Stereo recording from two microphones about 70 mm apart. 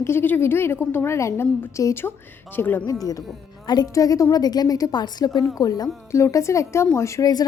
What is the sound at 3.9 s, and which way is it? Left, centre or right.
A woman's voice, left.